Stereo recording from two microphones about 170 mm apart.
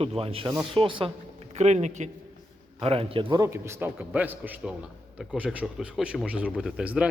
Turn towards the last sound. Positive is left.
turn(degrees=-5)  # may be behind; listen again after turning